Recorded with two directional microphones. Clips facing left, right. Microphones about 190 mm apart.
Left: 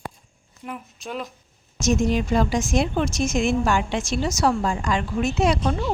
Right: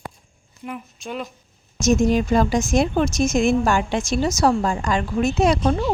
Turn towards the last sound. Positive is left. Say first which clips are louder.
# right 3 dB
turn(degrees=-40)  # may be behind; listen again after turning